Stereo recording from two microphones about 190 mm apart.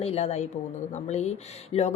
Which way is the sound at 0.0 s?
35° left (ahead or behind).